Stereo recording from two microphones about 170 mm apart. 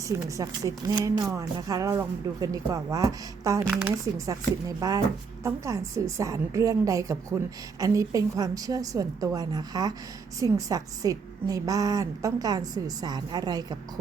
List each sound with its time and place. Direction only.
0.1 s a woman's voice: 20° right (ahead or behind)
4.8 s a woman's voice: 20° right (ahead or behind)